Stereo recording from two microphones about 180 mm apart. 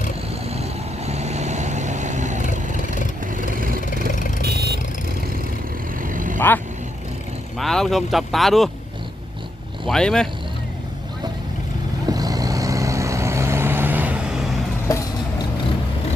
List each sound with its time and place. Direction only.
0.4 s vehicle: 35° right (ahead or behind)
4.1 s vehicle: 45° left (ahead or behind)
4.4 s vehicle: 65° right (ahead or behind)
6.0 s vehicle: 45° right (ahead or behind)
7.6 s speech: centre (ahead or behind)
9.8 s speech: 5° left (ahead or behind)
12.0 s vehicle: 20° right (ahead or behind); by 14.5 s 5° right (ahead or behind)